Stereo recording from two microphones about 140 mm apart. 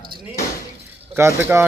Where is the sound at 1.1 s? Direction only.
15° right (ahead or behind).